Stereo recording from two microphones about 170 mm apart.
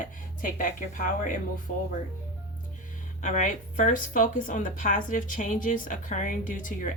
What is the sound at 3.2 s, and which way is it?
A woman's voice, 45° left (ahead or behind).